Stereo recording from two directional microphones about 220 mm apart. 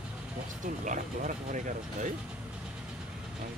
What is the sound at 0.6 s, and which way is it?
Speech, 35° right (ahead or behind).